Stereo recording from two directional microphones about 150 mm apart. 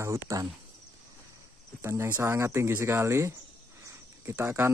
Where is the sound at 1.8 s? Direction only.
15° right (ahead or behind).